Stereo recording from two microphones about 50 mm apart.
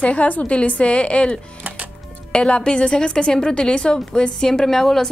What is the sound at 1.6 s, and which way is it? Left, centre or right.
Music, right.